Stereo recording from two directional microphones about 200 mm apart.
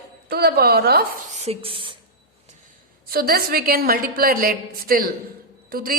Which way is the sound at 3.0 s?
50° right (ahead or behind).